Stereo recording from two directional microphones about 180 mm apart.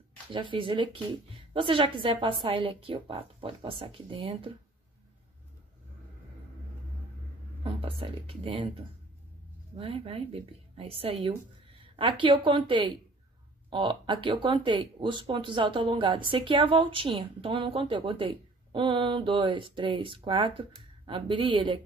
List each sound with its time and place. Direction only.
0.3 s speech: 30° right (ahead or behind)
7.6 s speech: 30° right (ahead or behind)